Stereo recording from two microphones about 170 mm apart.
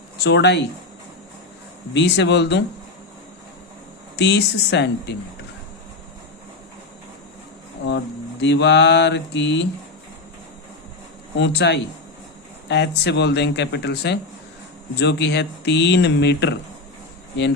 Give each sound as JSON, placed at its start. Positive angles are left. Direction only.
{"t": 0.3, "sound": "speech", "side_deg": 90}
{"t": 1.9, "sound": "speech", "side_deg": 90}
{"t": 4.2, "sound": "speech", "side_deg": 85}
{"t": 7.9, "sound": "mantra", "side_deg": 90}
{"t": 11.3, "sound": "speech", "side_deg": 90}